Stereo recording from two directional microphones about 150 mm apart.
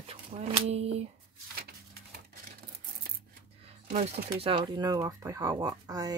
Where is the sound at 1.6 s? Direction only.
90° right.